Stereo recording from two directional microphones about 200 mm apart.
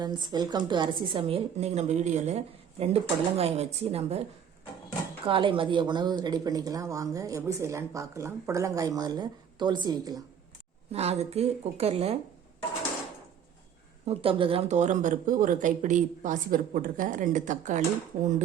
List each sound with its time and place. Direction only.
0.0 s a woman's voice: 20° right (ahead or behind)
10.9 s a woman's voice: 30° right (ahead or behind)
14.0 s a woman's voice: 30° right (ahead or behind)